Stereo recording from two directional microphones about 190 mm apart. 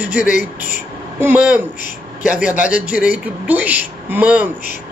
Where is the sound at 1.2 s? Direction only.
10° right (ahead or behind).